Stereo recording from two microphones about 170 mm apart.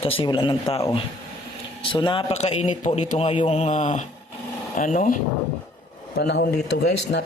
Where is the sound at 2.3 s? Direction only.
40° left (ahead or behind).